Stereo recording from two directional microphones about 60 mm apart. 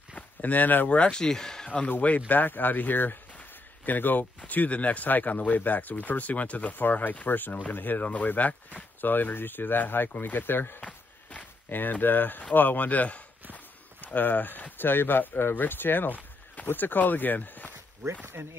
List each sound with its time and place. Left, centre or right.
0.1 s speech: left
0.9 s speech: centre
1.7 s speech: left
10.8 s a sound: left
14.0 s speech: left
18.2 s speech: right